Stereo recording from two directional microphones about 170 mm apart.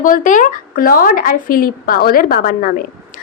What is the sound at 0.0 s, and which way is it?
Speech, 50° left (ahead or behind).